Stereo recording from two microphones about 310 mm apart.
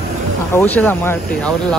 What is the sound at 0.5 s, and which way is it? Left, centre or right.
Speech, centre.